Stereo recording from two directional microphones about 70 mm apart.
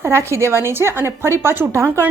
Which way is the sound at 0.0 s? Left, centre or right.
Right.